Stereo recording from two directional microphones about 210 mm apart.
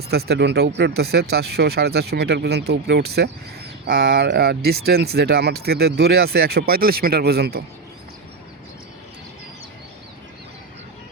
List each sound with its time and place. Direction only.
0.1 s speech: 50° right (ahead or behind)